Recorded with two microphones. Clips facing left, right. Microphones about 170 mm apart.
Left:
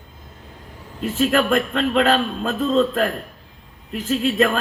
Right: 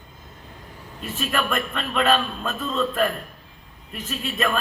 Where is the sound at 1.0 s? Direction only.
90° left.